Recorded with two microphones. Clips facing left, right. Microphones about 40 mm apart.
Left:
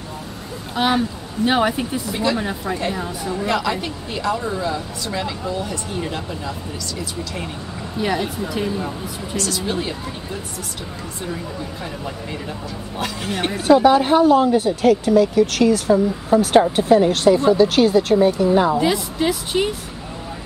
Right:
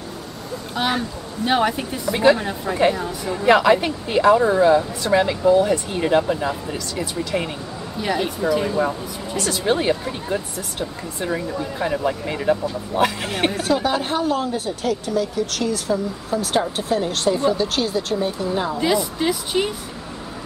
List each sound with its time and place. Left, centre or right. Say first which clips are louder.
0.7 s speech: left 4 dB; centre
3.4 s speech: right 9 dB; right
8.0 s speech: even; centre
9.4 s speech: right 4 dB; right
11.3 s speech: right 4 dB; right
13.5 s speech: left 10 dB; centre